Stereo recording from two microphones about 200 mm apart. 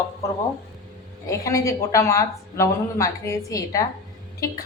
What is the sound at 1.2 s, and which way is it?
Speech, 15° left (ahead or behind).